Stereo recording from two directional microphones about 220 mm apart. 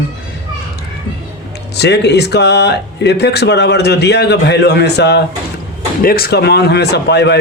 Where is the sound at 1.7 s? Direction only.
50° left (ahead or behind).